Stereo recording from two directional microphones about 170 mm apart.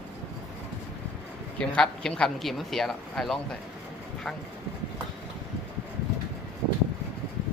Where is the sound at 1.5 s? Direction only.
5° left (ahead or behind).